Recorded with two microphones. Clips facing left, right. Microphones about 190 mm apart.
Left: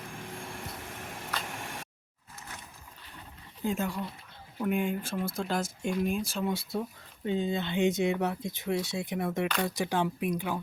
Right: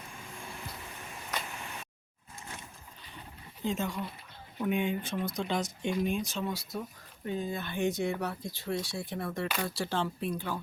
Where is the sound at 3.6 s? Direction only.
10° left (ahead or behind).